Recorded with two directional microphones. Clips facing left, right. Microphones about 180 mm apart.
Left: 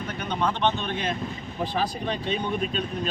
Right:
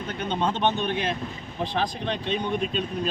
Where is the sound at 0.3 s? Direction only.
25° right (ahead or behind).